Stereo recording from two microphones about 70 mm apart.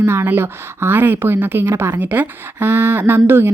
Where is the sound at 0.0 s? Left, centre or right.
Right.